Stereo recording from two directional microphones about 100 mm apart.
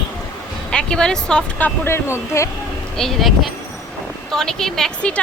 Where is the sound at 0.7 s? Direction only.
10° left (ahead or behind).